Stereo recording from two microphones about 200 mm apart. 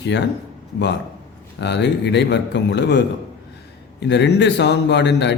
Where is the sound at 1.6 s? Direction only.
60° left (ahead or behind).